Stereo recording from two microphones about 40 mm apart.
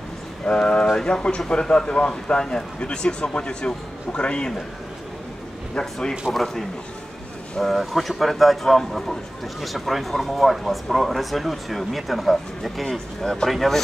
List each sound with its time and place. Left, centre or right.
0.6 s speech: left
5.8 s speech: centre
7.5 s speech: centre